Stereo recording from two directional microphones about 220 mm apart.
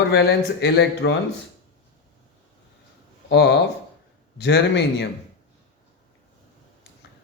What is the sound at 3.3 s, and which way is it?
Speech, 50° left (ahead or behind).